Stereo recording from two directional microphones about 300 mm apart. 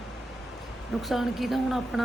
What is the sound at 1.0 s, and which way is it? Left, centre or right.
Speech, centre.